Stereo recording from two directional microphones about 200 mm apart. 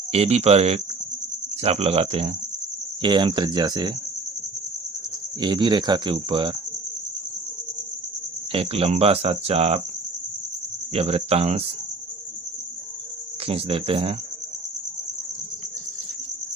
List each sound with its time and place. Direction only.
0.1 s speech: 30° right (ahead or behind)
5.4 s speech: 25° right (ahead or behind)
8.5 s speech: 30° right (ahead or behind)
10.9 s speech: 30° right (ahead or behind)
13.5 s speech: 30° right (ahead or behind)